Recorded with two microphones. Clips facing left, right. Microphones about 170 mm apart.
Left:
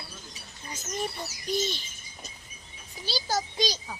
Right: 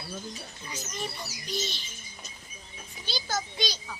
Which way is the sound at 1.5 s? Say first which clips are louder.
Left 6 dB; 45° left (ahead or behind).